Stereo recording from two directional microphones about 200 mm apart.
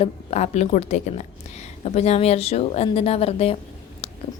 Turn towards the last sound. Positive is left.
turn(degrees=30)  # may be behind; listen again after turning